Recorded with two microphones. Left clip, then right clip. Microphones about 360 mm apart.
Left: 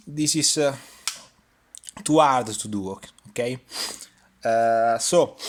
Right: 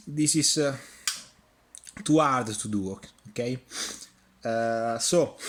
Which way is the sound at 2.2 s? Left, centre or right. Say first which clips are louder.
Left 6 dB; centre.